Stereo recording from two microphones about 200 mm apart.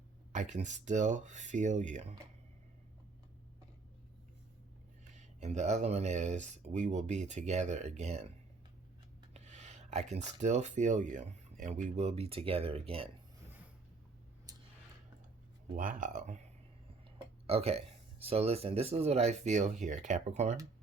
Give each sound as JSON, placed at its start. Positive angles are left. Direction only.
{"t": 0.3, "sound": "speech", "side_deg": -35}
{"t": 5.1, "sound": "speech", "side_deg": -35}
{"t": 9.3, "sound": "speech", "side_deg": -35}
{"t": 15.7, "sound": "speech", "side_deg": -40}
{"t": 17.4, "sound": "speech", "side_deg": -30}